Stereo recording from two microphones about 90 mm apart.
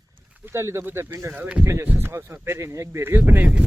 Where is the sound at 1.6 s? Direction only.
25° right (ahead or behind).